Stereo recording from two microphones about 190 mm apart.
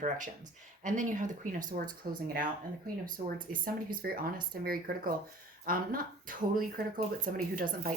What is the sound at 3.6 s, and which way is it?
Speech, 50° right (ahead or behind).